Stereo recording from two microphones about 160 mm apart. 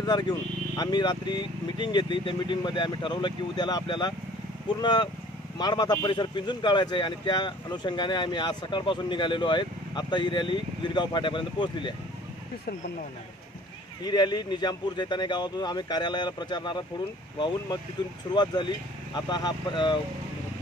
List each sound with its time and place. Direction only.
0.0 s speech: 30° left (ahead or behind)
14.0 s speech: 25° left (ahead or behind)
18.3 s speech: 25° left (ahead or behind)